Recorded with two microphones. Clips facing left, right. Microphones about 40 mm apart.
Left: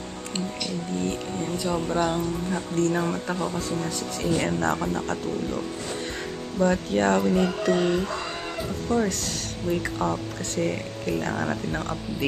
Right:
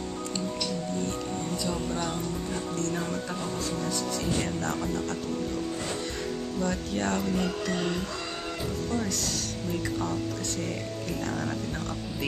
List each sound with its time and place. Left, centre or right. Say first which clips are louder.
0.3 s speech: left 3 dB; left
6.6 s speech: left 9 dB; left